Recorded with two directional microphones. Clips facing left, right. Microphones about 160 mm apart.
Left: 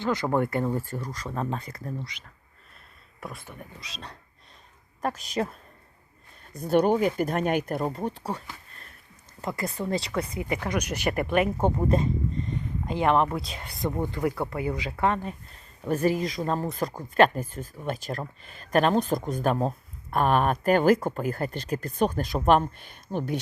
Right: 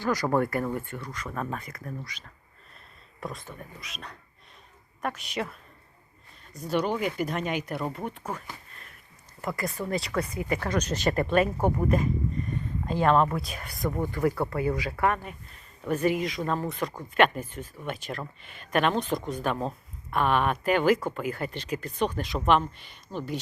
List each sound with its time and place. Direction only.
0.0 s speech: 25° left (ahead or behind)
0.9 s speech: 40° left (ahead or behind)
1.3 s speech: 25° left (ahead or behind)
3.2 s speech: 5° left (ahead or behind)
3.8 s speech: 35° left (ahead or behind)
6.5 s speech: 55° left (ahead or behind)
7.9 s speech: 35° left (ahead or behind)
9.4 s speech: 20° left (ahead or behind); by 23.4 s 55° left (ahead or behind)